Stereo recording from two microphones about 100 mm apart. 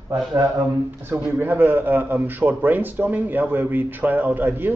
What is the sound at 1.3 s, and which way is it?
A man's voice, 20° right (ahead or behind).